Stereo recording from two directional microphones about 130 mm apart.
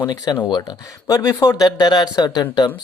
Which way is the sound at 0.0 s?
35° left (ahead or behind).